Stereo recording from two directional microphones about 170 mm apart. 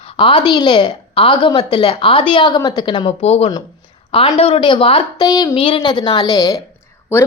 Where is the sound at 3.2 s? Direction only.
40° left (ahead or behind); by 6.6 s 20° left (ahead or behind).